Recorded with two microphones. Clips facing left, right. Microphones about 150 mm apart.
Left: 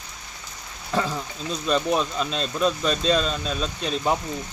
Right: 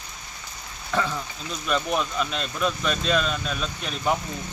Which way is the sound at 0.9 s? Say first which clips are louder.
Left 1 dB; 35° left (ahead or behind).